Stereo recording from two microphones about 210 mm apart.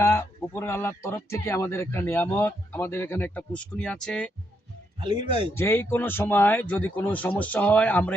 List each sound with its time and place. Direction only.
0.0 s speech: 10° left (ahead or behind)
4.9 s speech: 20° right (ahead or behind)
5.5 s speech: 10° left (ahead or behind)